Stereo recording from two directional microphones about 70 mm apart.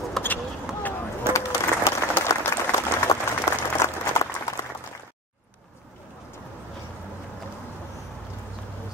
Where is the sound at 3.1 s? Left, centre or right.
Left.